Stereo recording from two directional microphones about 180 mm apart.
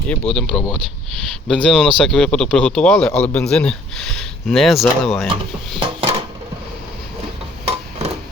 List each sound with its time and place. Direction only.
0.3 s speech: centre (ahead or behind)
5.8 s dishes: 30° right (ahead or behind)
7.7 s a sound: 35° right (ahead or behind)